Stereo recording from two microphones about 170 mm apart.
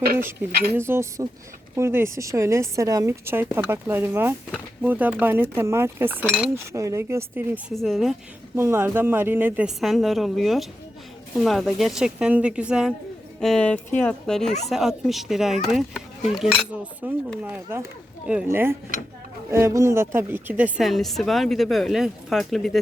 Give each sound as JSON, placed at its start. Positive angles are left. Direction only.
{"t": 0.5, "sound": "speech", "side_deg": -65}
{"t": 0.8, "sound": "a woman's voice", "side_deg": -15}
{"t": 7.7, "sound": "a woman's voice", "side_deg": 0}
{"t": 8.5, "sound": "a woman's voice", "side_deg": -15}